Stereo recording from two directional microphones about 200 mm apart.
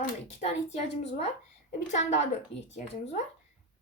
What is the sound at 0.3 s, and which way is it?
Speech, 35° left (ahead or behind).